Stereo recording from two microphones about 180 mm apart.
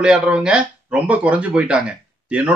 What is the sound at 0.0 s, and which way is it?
Speech, 5° right (ahead or behind).